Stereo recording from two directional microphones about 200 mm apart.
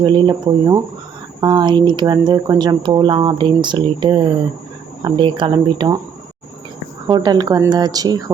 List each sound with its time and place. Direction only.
0.0 s speech: 25° right (ahead or behind)
7.1 s speech: 20° right (ahead or behind)